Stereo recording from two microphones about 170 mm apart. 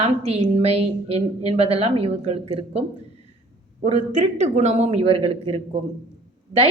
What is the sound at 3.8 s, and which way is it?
Speech, 45° right (ahead or behind).